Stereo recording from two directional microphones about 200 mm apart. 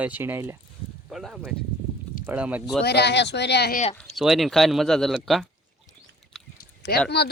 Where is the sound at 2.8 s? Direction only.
55° left (ahead or behind).